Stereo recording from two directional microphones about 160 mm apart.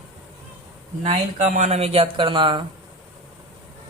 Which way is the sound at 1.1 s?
50° right (ahead or behind).